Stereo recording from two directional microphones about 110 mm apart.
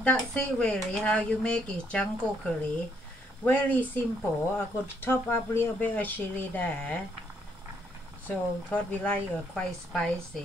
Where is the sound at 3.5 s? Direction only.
15° left (ahead or behind).